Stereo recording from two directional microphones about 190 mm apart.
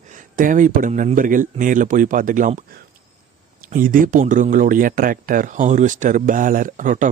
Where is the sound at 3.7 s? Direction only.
45° right (ahead or behind).